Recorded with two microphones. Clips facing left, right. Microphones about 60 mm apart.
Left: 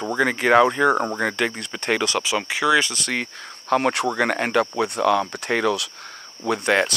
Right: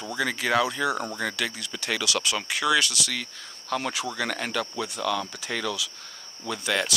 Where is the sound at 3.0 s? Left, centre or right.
Left.